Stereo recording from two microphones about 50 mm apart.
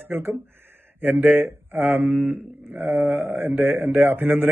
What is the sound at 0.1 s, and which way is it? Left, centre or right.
Speech, right.